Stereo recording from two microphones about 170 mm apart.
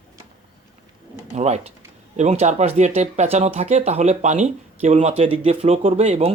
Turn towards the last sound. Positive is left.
turn(degrees=-40)  # may be behind; listen again after turning